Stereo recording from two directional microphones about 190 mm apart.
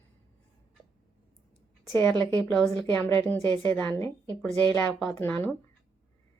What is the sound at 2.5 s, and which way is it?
A woman's voice, 10° left (ahead or behind).